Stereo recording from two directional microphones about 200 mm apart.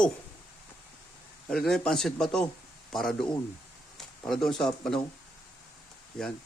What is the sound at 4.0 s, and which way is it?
Speech, centre (ahead or behind).